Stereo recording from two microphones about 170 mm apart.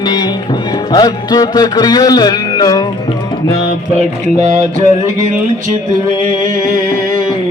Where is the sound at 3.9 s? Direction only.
40° right (ahead or behind).